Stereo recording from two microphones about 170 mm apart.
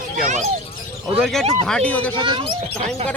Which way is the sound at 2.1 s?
30° right (ahead or behind).